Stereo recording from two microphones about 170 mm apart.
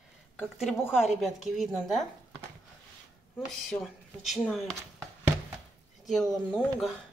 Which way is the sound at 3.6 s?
Centre (ahead or behind).